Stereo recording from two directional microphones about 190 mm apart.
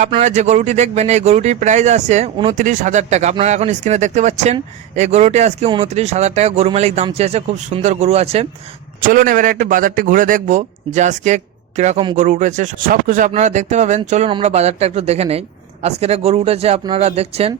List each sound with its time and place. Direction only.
0.1 s speech: 35° right (ahead or behind)
9.0 s a man's voice: 50° right (ahead or behind); by 17.5 s 30° right (ahead or behind)